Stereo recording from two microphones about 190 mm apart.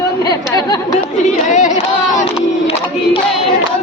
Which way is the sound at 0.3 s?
20° left (ahead or behind).